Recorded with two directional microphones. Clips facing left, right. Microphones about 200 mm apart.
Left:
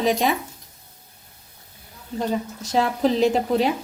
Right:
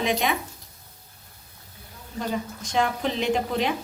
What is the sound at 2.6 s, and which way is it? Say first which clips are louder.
A woman's voice: left 5 dB; 40° left (ahead or behind).